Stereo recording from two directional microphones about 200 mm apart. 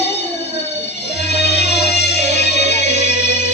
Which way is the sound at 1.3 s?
55° left (ahead or behind).